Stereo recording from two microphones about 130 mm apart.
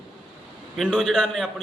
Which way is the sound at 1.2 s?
5° left (ahead or behind).